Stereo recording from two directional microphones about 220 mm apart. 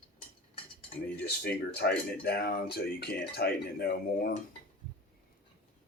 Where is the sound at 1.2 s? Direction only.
45° left (ahead or behind).